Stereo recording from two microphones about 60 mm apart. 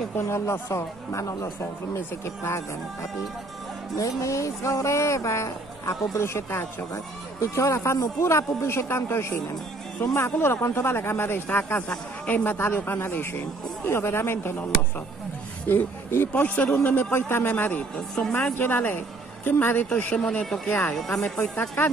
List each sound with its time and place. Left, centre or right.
0.1 s speech: left
3.9 s speech: left
15.6 s speech: left
16.4 s a man's voice: left
17.9 s speech: centre
18.4 s a woman's voice: left
19.9 s a man's voice: left
20.9 s speech: centre
21.4 s speech: left